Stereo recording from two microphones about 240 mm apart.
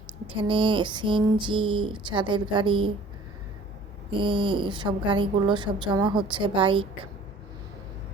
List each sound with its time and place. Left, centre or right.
0.3 s a woman's voice: right
4.2 s a woman's voice: right